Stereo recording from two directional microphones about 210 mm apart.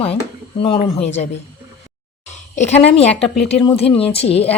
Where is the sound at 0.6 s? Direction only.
25° left (ahead or behind).